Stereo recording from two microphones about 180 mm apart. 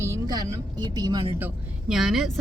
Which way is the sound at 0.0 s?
20° right (ahead or behind).